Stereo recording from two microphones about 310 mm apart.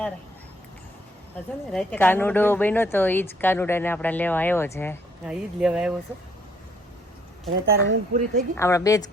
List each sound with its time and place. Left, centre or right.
1.7 s speech: centre
5.2 s speech: centre
7.6 s speech: right
8.5 s speech: centre